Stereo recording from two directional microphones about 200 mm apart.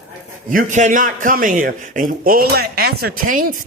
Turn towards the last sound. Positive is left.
turn(degrees=-45)  # may be behind; listen again after turning